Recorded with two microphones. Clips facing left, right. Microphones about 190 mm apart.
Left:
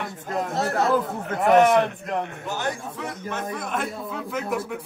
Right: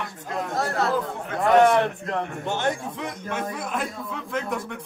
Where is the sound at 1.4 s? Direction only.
20° left (ahead or behind).